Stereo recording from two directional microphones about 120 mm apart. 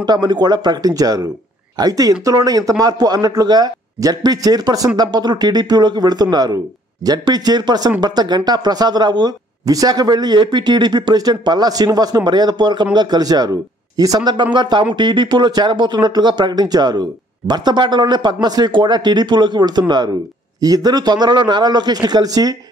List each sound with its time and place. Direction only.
0.0 s speech: 35° right (ahead or behind)